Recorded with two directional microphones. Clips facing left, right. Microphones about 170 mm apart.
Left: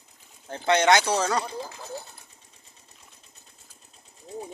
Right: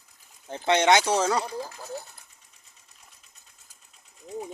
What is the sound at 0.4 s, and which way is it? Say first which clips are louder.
Speech: even; 10° right (ahead or behind).